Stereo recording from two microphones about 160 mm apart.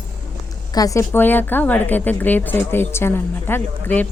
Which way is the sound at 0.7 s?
20° left (ahead or behind).